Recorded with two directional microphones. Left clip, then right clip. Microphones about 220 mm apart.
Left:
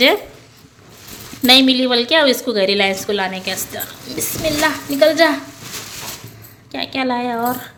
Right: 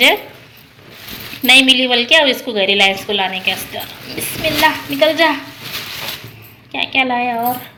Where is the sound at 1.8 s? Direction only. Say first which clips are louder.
Right 2 dB; 15° left (ahead or behind).